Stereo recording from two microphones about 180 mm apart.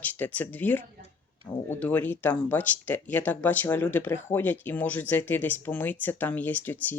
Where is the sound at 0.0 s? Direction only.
10° left (ahead or behind).